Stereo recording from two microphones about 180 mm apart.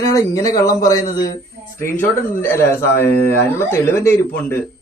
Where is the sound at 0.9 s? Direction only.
50° left (ahead or behind).